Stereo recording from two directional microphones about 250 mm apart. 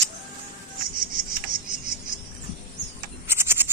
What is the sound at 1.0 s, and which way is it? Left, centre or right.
Cricket, right.